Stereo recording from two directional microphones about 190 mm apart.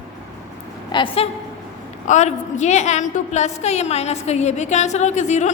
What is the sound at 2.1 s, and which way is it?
A woman's voice, 40° left (ahead or behind).